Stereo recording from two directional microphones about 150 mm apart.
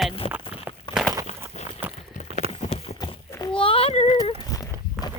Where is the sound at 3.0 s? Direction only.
25° left (ahead or behind).